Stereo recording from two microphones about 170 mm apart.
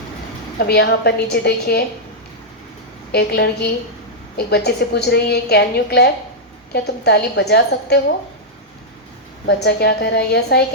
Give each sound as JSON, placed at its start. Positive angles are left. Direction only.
{"t": 0.6, "sound": "a woman's voice", "side_deg": 70}
{"t": 3.1, "sound": "a woman's voice", "side_deg": 70}
{"t": 9.5, "sound": "a woman's voice", "side_deg": 80}